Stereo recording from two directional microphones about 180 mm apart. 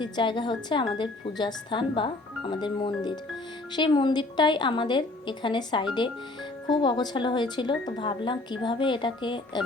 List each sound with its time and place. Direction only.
0.0 s speech: 25° left (ahead or behind)